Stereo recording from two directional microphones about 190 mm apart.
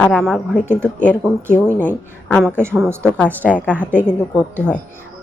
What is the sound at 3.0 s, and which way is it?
Speech, 5° left (ahead or behind).